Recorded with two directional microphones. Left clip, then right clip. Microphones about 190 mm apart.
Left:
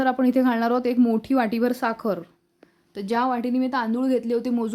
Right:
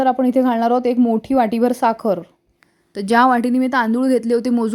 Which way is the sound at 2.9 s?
40° right (ahead or behind).